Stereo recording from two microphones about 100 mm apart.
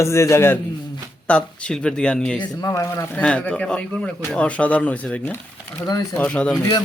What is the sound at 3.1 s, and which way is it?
A man's voice, 10° left (ahead or behind).